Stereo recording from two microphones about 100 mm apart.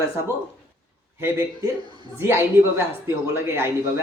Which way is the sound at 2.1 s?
25° right (ahead or behind).